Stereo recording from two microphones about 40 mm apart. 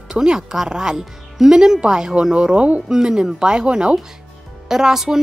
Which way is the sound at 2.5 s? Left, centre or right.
Right.